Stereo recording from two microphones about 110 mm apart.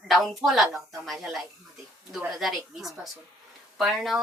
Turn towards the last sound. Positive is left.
turn(degrees=0)  # may be behind; listen again after turning